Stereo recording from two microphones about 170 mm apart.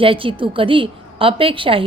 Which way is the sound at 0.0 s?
30° right (ahead or behind).